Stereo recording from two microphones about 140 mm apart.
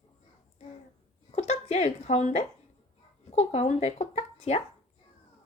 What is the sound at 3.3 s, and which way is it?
Speech, 50° left (ahead or behind).